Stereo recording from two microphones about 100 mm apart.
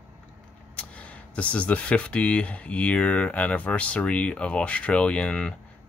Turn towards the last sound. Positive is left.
turn(degrees=10)  # may be behind; listen again after turning